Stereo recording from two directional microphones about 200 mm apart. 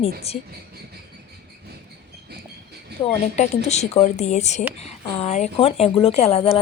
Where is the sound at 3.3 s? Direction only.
35° left (ahead or behind).